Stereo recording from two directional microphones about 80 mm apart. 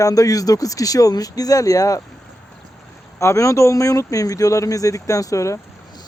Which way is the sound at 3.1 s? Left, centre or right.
Left.